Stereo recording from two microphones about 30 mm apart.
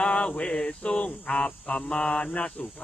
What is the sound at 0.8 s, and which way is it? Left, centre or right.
Cricket, left.